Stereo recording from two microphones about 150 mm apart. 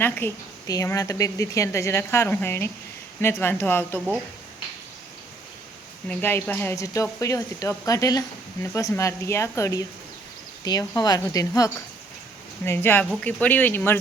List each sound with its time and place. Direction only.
0.0 s a woman's voice: 15° left (ahead or behind)
6.1 s a woman's voice: 15° left (ahead or behind)